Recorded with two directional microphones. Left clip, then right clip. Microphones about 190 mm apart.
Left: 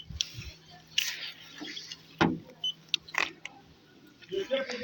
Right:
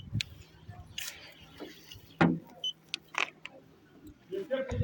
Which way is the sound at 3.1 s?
5° right (ahead or behind).